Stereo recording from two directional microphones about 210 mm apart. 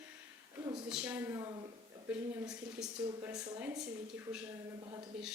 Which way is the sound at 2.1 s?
10° right (ahead or behind).